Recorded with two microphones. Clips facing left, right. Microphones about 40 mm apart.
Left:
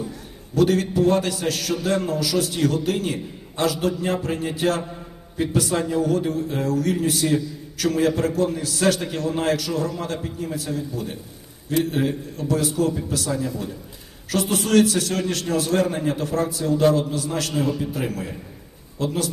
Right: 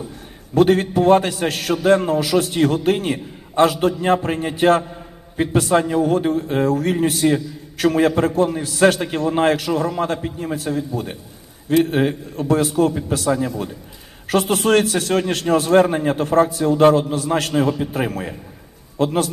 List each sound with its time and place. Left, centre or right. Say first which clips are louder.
0.5 s a man's voice: right 4 dB; right